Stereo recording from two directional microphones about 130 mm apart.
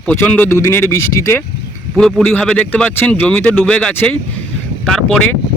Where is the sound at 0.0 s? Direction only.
10° left (ahead or behind).